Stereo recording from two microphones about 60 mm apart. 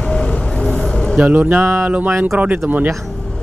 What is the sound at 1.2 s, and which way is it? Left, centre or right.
Speech, right.